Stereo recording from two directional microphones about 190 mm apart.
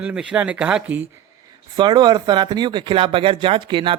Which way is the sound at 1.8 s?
25° right (ahead or behind).